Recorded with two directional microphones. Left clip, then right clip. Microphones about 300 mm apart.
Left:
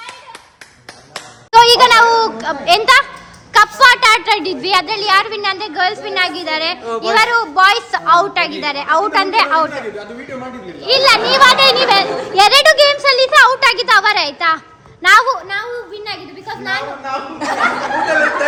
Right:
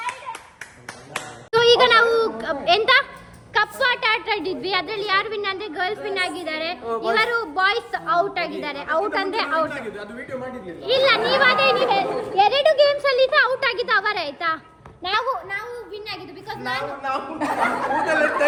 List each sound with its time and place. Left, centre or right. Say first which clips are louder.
1.5 s a sound: left 8 dB; centre
3.5 s a woman's voice: left 12 dB; centre
10.8 s a child's voice: left 7 dB; centre
17.4 s speech: left 6 dB; right